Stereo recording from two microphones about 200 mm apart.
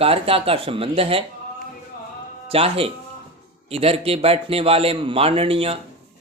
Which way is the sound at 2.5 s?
30° right (ahead or behind).